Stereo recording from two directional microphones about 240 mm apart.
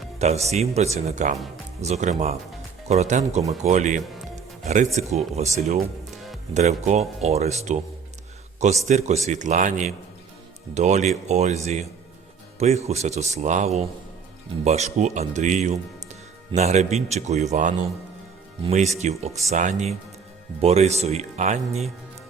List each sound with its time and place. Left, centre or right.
0.2 s a man's voice: right
6.5 s a man's voice: right
8.6 s a man's voice: right
18.9 s a man's voice: right